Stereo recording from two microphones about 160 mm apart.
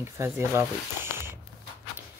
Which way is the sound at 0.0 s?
15° right (ahead or behind).